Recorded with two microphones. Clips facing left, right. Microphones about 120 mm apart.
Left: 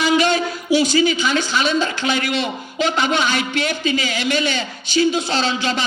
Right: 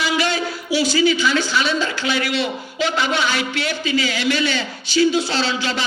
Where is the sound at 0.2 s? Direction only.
20° left (ahead or behind).